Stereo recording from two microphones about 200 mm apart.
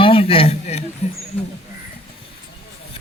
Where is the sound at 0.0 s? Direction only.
25° left (ahead or behind).